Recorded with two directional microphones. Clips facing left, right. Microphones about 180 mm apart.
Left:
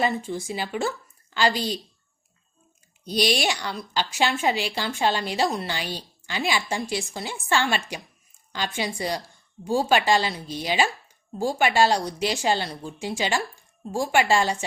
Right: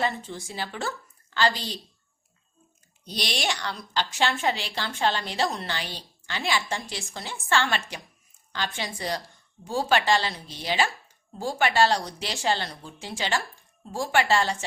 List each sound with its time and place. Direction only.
0.0 s speech: 15° left (ahead or behind)
3.0 s speech: 15° left (ahead or behind)